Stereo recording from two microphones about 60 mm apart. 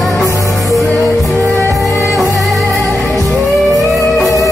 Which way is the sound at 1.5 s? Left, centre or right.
Right.